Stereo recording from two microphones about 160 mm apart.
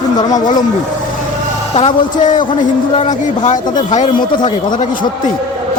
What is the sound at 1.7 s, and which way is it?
Speech, 45° left (ahead or behind).